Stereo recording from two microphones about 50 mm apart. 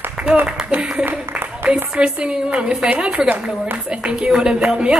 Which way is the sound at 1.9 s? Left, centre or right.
Centre.